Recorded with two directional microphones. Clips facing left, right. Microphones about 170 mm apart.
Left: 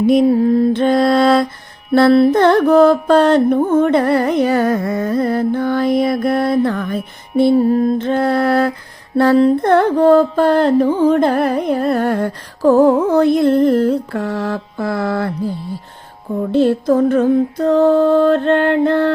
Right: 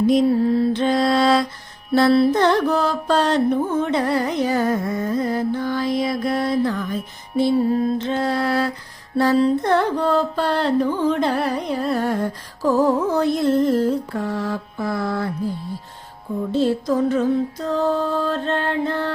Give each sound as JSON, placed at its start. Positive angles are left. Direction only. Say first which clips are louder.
{"t": 0.1, "sound": "mantra", "louder": "left 7 dB", "side_deg": 50}
{"t": 7.7, "sound": "mantra", "louder": "left 5 dB", "side_deg": 50}
{"t": 16.5, "sound": "mantra", "louder": "left 6 dB", "side_deg": 60}